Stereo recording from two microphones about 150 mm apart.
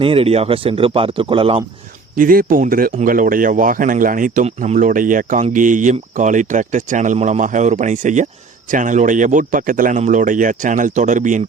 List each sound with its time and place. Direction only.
0.0 s speech: 40° right (ahead or behind)
2.1 s speech: 70° right (ahead or behind)
4.4 s speech: 50° right (ahead or behind)